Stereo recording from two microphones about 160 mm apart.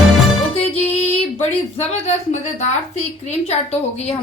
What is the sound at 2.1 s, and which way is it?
A woman's voice, 45° left (ahead or behind).